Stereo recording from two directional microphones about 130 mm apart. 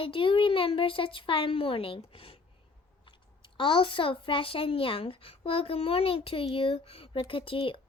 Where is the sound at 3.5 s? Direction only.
40° left (ahead or behind).